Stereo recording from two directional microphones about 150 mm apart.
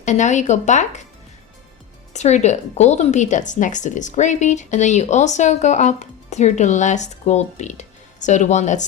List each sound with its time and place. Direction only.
0.0 s a woman's voice: 55° left (ahead or behind)
2.1 s a woman's voice: 50° left (ahead or behind)